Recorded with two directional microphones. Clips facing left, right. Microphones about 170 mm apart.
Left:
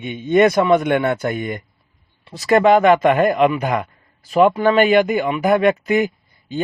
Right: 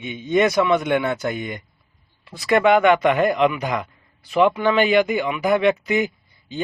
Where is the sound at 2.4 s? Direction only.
40° left (ahead or behind).